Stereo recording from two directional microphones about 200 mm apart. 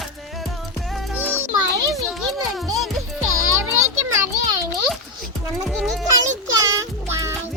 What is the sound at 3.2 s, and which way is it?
Music, 90° right.